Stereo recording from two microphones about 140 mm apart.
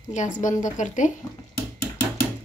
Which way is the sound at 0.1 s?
60° left (ahead or behind).